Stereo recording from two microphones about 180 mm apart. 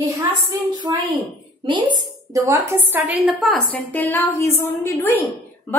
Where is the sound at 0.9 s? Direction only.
20° right (ahead or behind).